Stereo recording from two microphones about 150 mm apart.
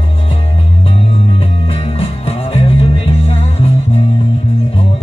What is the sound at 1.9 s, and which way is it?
Music, 40° left (ahead or behind).